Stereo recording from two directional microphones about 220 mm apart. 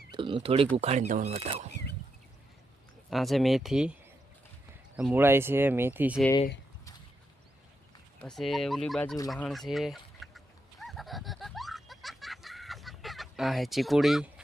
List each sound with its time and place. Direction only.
0.1 s a sound: 25° right (ahead or behind)
0.4 s speech: 25° right (ahead or behind)
3.1 s speech: centre (ahead or behind)
4.9 s speech: 5° right (ahead or behind)
8.2 s speech: centre (ahead or behind)
9.3 s a sound: centre (ahead or behind)